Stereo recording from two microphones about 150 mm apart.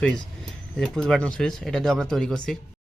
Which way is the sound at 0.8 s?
5° left (ahead or behind).